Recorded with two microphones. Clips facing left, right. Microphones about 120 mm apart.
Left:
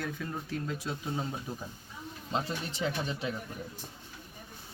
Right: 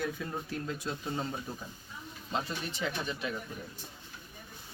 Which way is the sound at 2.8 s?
30° left (ahead or behind).